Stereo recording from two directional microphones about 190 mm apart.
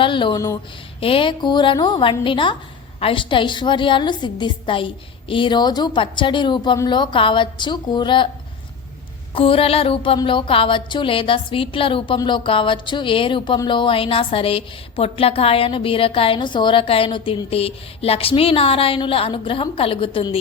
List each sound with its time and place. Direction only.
0.0 s speech: 25° left (ahead or behind)
0.9 s speech: 30° left (ahead or behind)
9.3 s speech: 30° left (ahead or behind)